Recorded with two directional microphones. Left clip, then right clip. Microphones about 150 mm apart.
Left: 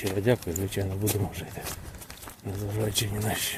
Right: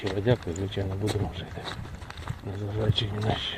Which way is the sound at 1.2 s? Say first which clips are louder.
Even; 30° left (ahead or behind).